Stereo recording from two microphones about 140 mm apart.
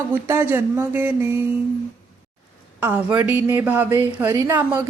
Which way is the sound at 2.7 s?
10° right (ahead or behind).